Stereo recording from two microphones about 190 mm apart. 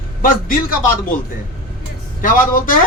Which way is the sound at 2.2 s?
45° left (ahead or behind).